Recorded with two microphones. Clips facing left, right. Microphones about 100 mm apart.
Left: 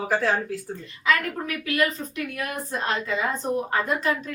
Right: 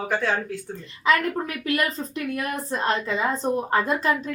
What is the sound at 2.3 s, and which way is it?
A woman's voice, 30° right (ahead or behind).